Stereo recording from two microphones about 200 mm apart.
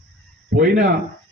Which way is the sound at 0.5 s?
45° right (ahead or behind).